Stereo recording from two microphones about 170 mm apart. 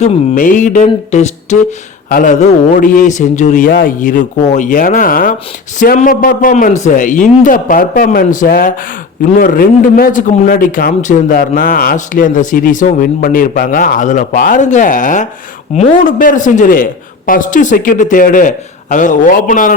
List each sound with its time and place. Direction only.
0.0 s a man's voice: 45° left (ahead or behind)
3.7 s a man's voice: 60° left (ahead or behind)